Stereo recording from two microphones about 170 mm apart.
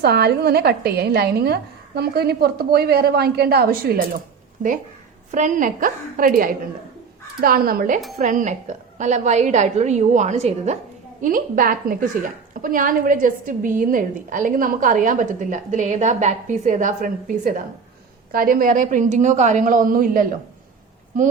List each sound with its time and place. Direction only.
0.0 s a woman's voice: 70° right (ahead or behind)
5.3 s a woman's voice: 50° right (ahead or behind)
11.2 s a woman's voice: 55° right (ahead or behind)